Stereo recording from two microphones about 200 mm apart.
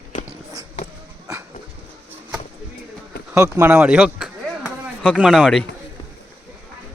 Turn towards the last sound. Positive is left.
turn(degrees=0)  # may be behind; listen again after turning